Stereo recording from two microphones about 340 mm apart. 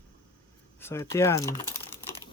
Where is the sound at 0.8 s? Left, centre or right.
Centre.